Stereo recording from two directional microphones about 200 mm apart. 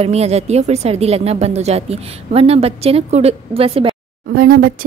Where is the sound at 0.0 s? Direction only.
30° right (ahead or behind).